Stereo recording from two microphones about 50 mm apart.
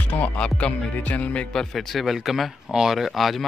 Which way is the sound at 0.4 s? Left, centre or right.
Left.